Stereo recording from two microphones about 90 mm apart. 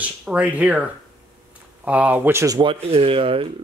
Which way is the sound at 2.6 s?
90° right.